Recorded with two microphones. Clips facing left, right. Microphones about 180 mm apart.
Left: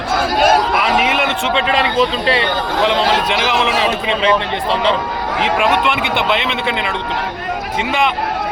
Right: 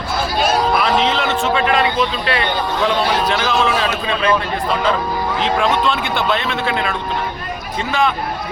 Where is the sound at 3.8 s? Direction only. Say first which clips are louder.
Left 2 dB; 20° left (ahead or behind).